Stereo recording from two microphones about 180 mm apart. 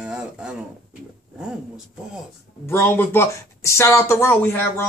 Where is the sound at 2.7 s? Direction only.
10° left (ahead or behind).